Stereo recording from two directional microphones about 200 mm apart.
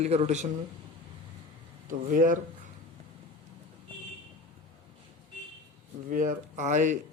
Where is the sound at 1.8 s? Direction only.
40° right (ahead or behind).